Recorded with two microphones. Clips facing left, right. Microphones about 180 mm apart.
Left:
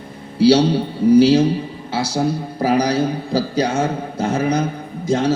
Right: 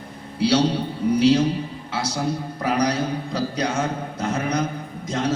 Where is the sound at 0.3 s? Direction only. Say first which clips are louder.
Left 7 dB; 30° left (ahead or behind).